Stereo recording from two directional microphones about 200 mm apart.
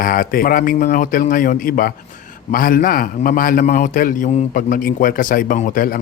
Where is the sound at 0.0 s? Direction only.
45° left (ahead or behind).